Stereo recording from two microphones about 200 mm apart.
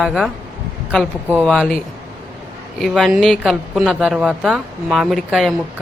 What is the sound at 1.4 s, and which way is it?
Speech, 5° left (ahead or behind).